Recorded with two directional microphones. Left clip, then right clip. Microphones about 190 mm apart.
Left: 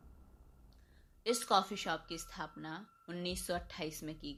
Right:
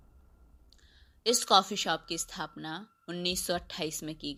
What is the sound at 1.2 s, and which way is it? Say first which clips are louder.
A woman's voice: right 7 dB; 35° right (ahead or behind).